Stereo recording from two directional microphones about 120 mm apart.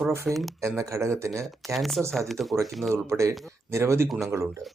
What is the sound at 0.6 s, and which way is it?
Speech, 25° right (ahead or behind).